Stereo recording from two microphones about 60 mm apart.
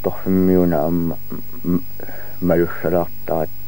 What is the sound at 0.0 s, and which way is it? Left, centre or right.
Speech, left.